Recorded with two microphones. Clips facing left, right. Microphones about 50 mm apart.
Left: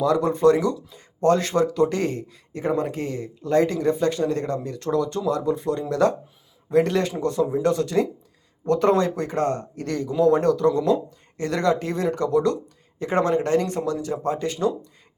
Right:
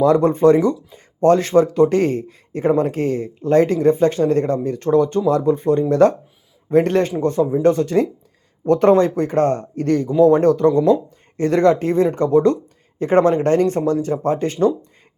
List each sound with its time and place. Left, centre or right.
0.0 s speech: right